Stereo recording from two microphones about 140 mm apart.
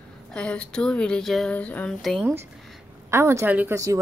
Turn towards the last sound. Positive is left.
turn(degrees=-20)  # may be behind; listen again after turning